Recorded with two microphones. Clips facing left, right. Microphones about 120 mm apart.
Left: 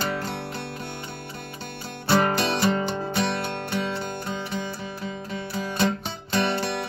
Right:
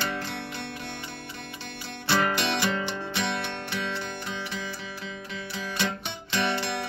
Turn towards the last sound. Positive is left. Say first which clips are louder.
# left 3 dB
turn(degrees=50)  # may be behind; listen again after turning